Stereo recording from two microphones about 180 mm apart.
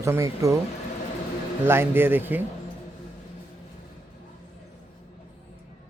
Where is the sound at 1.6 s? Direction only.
10° right (ahead or behind).